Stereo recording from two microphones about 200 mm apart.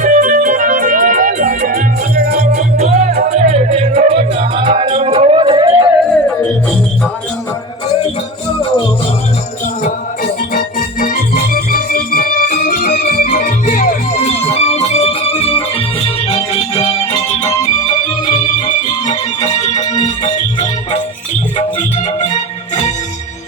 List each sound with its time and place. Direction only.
0.0 s music: 40° right (ahead or behind); by 5.9 s 25° right (ahead or behind)
6.1 s music: 5° left (ahead or behind)
10.5 s music: 45° left (ahead or behind)
14.4 s music: 30° left (ahead or behind)
18.3 s music: 35° left (ahead or behind)